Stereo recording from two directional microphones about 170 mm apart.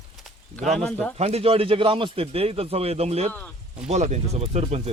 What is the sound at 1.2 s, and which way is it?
A man's voice, 35° right (ahead or behind).